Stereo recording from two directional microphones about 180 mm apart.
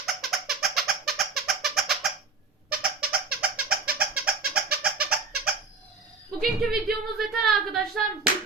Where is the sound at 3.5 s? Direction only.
55° right (ahead or behind).